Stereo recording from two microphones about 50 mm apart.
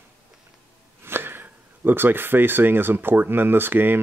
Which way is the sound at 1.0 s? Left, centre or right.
Right.